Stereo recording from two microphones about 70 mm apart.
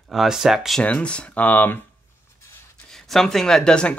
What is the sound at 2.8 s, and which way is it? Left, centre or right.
Speech, centre.